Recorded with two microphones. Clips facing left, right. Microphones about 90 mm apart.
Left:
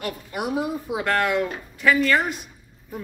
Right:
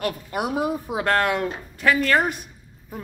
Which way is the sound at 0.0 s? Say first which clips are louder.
Right 3 dB; 50° right (ahead or behind).